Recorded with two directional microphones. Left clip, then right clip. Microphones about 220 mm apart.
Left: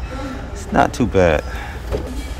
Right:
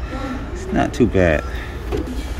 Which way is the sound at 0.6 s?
10° left (ahead or behind).